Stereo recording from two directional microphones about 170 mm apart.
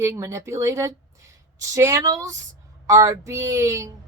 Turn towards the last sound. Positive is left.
turn(degrees=-15)  # may be behind; listen again after turning